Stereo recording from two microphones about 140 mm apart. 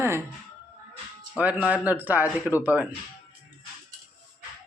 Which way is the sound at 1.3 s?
10° right (ahead or behind).